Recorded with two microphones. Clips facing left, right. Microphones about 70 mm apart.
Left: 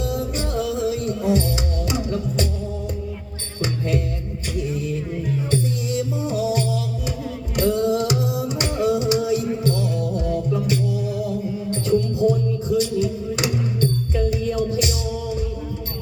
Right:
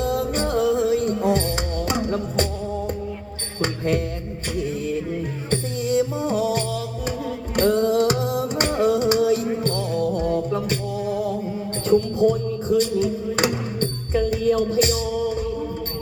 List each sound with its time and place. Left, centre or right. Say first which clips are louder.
0.0 s music: right 3 dB; right
3.6 s music: right 1 dB; right
5.5 s music: right 4 dB; right